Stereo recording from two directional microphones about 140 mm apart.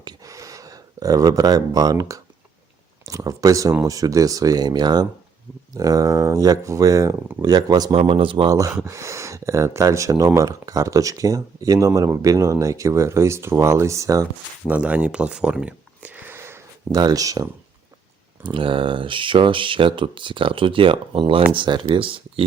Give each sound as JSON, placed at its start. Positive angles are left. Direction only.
{"t": 0.0, "sound": "a sound", "side_deg": -30}
{"t": 3.1, "sound": "speech", "side_deg": -25}
{"t": 8.5, "sound": "speech", "side_deg": -20}
{"t": 14.7, "sound": "speech", "side_deg": -10}
{"t": 18.4, "sound": "speech", "side_deg": -35}